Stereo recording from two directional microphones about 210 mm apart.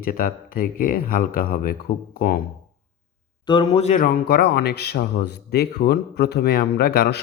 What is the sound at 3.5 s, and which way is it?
Speech, 25° left (ahead or behind).